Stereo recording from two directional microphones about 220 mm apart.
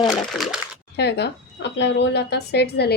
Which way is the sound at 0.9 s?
50° left (ahead or behind).